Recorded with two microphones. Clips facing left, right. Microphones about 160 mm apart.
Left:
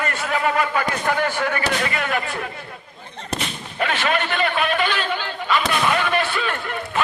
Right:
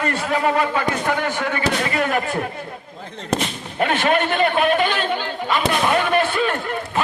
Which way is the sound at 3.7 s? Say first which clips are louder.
Right 4 dB; 45° right (ahead or behind).